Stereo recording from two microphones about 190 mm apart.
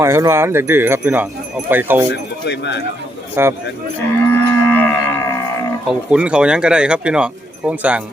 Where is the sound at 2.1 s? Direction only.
65° left (ahead or behind).